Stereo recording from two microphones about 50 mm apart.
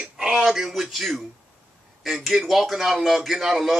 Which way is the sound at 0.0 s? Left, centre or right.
Centre.